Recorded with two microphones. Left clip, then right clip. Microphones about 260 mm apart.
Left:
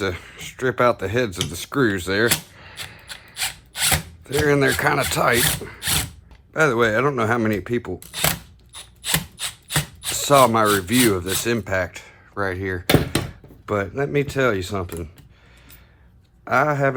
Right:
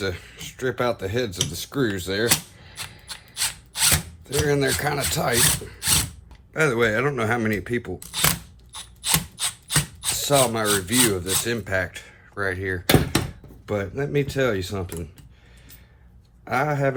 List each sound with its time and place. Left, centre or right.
0.0 s speech: left
3.1 s mechanisms: centre
4.4 s speech: left
5.8 s mechanisms: centre
6.5 s speech: centre
7.9 s mechanisms: centre
10.2 s speech: left
16.4 s speech: left